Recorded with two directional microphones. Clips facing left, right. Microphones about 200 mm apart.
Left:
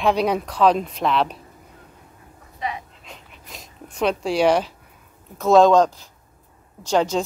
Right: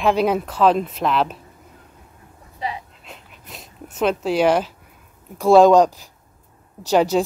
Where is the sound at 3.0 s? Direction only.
Centre (ahead or behind).